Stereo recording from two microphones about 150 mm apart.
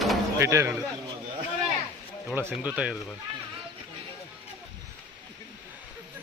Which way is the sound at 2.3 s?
15° right (ahead or behind).